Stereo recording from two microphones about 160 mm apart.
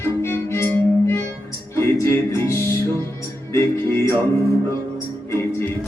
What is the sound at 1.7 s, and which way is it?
Music, 15° left (ahead or behind).